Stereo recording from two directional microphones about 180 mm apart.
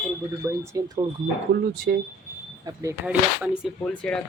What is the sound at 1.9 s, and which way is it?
Speech, 50° right (ahead or behind).